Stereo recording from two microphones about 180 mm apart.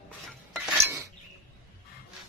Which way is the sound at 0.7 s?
15° right (ahead or behind).